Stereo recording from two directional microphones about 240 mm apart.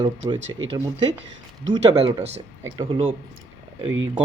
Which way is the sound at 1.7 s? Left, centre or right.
Right.